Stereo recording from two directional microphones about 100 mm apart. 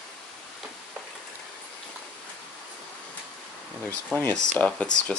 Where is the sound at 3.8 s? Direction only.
20° left (ahead or behind).